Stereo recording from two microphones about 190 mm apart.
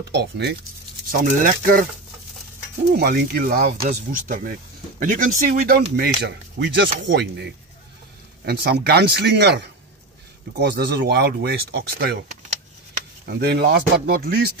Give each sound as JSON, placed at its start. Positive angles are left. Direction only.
{"t": 0.1, "sound": "speech", "side_deg": -65}
{"t": 1.4, "sound": "speech", "side_deg": -45}
{"t": 2.9, "sound": "speech", "side_deg": -55}
{"t": 13.2, "sound": "speech", "side_deg": -55}